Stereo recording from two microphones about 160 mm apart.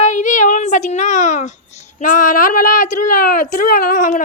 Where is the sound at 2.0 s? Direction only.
55° left (ahead or behind).